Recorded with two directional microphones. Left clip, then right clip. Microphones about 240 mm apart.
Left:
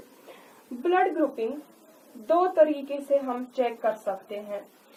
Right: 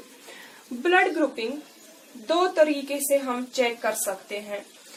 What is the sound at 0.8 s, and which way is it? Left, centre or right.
Speech, right.